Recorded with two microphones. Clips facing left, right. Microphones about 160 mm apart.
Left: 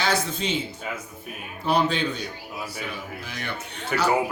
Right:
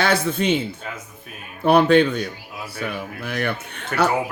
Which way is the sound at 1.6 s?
60° right (ahead or behind).